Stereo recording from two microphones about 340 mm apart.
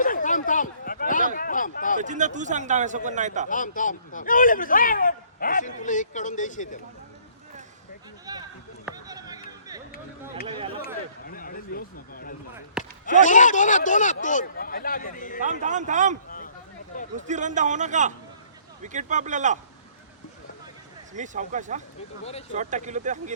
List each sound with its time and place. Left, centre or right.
0.0 s a sound: left
2.0 s a man's voice: right
3.5 s speech: left
8.3 s a sound: centre
11.3 s speech: left
12.8 s basketball bounce: centre
13.2 s speech: left
15.6 s a man's voice: right
17.2 s a man's voice: right
21.1 s a man's voice: right
22.2 s speech: centre
22.5 s a man's voice: right